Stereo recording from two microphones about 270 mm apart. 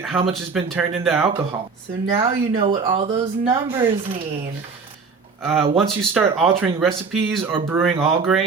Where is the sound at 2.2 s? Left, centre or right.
Centre.